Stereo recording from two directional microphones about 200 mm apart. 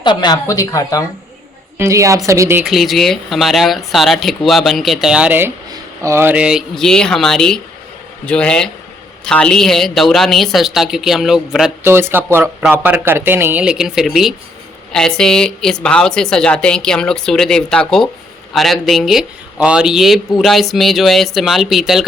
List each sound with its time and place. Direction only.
0.0 s a woman's voice: 20° left (ahead or behind)
1.8 s speech: 15° right (ahead or behind)
2.6 s a woman's voice: centre (ahead or behind)